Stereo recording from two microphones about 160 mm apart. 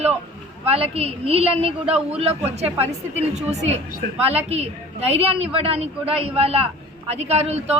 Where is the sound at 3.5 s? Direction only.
40° right (ahead or behind).